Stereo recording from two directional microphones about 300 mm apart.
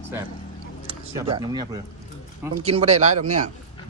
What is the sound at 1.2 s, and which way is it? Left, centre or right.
Speech, centre.